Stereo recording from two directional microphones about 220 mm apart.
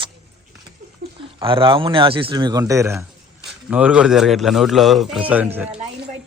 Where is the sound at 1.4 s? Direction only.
20° right (ahead or behind); by 5.8 s 5° right (ahead or behind).